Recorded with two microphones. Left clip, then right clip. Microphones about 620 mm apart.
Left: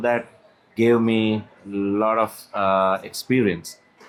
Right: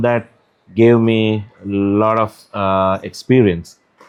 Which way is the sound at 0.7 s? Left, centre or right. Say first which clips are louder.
Right 6 dB; right.